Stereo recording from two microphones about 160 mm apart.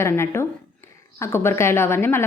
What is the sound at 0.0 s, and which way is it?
Speech, 15° left (ahead or behind).